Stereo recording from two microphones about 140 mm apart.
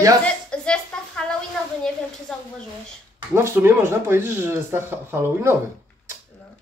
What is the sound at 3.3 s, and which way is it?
Speech, 15° right (ahead or behind).